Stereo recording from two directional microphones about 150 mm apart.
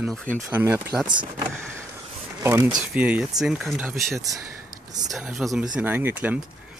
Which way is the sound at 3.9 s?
20° right (ahead or behind).